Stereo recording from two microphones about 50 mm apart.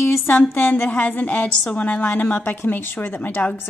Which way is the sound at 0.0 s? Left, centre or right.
Left.